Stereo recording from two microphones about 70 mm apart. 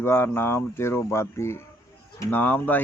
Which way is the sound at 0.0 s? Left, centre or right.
Left.